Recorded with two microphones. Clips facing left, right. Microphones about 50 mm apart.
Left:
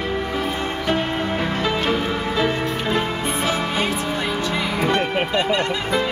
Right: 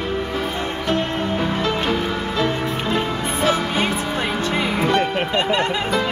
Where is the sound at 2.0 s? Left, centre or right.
Centre.